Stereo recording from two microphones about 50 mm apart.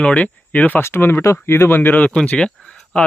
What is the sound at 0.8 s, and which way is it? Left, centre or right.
Speech, left.